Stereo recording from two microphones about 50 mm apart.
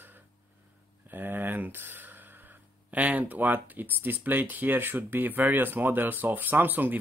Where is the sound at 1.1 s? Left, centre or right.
Right.